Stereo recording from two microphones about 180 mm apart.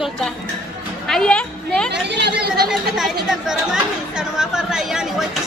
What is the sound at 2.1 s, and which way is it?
Speech, 65° right (ahead or behind).